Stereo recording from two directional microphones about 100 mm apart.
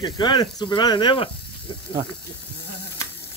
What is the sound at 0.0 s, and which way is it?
Speech, 50° left (ahead or behind).